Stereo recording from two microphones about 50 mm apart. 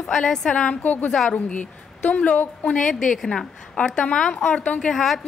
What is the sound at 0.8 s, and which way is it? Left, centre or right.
Speech, left.